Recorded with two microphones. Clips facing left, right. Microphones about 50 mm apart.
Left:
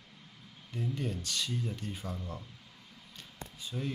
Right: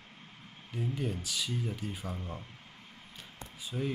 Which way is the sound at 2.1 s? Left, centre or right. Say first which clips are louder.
Right 1 dB; right.